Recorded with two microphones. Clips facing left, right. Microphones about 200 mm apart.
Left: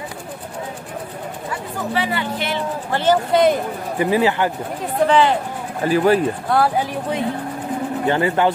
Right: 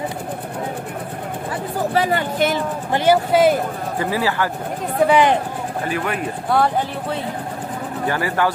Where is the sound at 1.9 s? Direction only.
45° right (ahead or behind).